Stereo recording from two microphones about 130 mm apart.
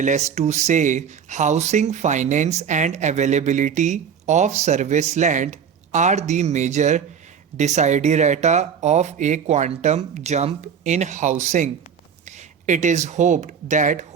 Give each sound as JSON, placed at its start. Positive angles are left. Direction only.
{"t": 0.0, "sound": "speech", "side_deg": -65}